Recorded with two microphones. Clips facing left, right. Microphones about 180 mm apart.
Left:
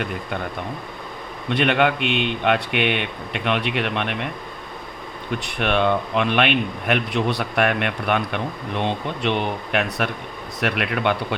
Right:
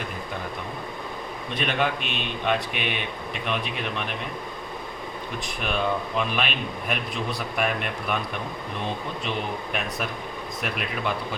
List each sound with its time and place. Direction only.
1.5 s speech: 70° left (ahead or behind)
5.4 s speech: 70° left (ahead or behind)